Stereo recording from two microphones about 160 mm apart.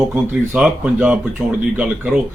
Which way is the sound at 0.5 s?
5° right (ahead or behind).